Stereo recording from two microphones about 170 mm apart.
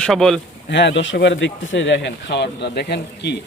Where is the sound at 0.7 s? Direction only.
90° left.